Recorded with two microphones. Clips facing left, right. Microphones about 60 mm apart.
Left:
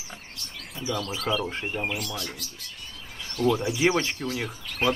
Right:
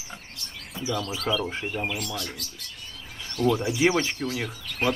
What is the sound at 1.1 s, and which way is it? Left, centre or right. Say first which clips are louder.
Speech: left 1 dB; left.